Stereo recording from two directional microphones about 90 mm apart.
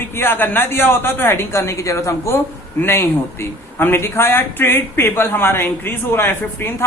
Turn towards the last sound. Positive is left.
turn(degrees=25)  # may be behind; listen again after turning